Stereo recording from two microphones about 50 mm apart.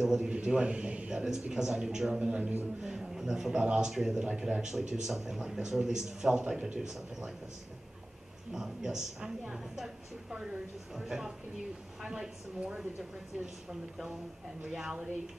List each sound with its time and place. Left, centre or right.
0.0 s speech: centre
0.3 s a man's voice: centre
1.1 s speech: centre
2.2 s a man's voice: right
2.8 s speech: centre
8.5 s speech: centre
11.0 s speech: centre
12.0 s a man's voice: right
14.7 s speech: centre